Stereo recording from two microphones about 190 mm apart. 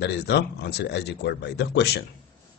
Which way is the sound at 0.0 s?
65° left (ahead or behind).